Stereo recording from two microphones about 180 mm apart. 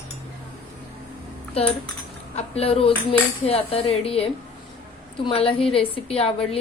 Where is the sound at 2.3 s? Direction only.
35° left (ahead or behind).